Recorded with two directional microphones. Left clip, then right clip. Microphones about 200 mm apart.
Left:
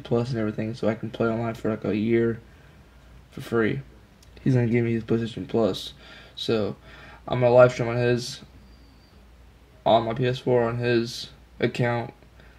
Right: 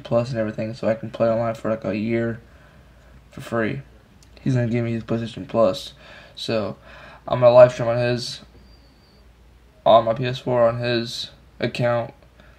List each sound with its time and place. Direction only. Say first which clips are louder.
0.0 s speech: right 4 dB; 10° left (ahead or behind)
3.3 s speech: even; 10° left (ahead or behind)
9.8 s speech: right 5 dB; 10° left (ahead or behind)